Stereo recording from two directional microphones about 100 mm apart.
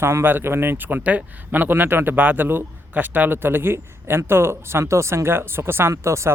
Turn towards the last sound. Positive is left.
turn(degrees=-30)  # may be behind; listen again after turning